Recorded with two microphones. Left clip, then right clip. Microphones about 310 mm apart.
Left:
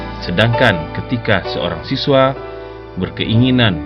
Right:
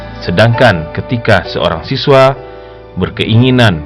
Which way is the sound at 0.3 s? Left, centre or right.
Right.